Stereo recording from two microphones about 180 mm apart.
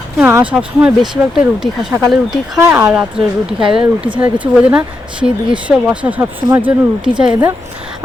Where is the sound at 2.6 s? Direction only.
15° right (ahead or behind).